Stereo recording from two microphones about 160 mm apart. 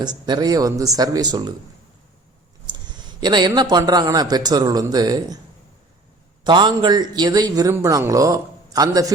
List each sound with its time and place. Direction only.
0.0 s a man's voice: 25° right (ahead or behind)
2.6 s speech: 30° right (ahead or behind)
6.4 s a man's voice: 30° right (ahead or behind)